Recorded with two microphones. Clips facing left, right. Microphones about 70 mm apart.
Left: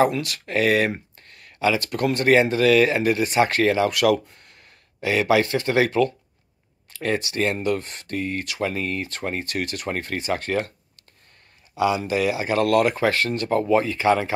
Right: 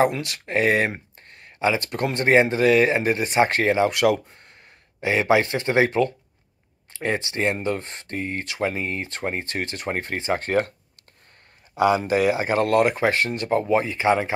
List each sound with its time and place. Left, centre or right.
0.0 s speech: right
11.7 s speech: right